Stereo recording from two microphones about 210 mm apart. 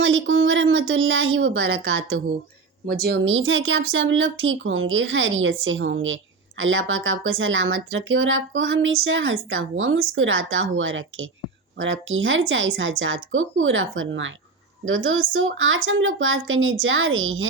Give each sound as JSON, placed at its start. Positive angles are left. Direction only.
{"t": 0.0, "sound": "speech", "side_deg": -65}
{"t": 2.8, "sound": "speech", "side_deg": -45}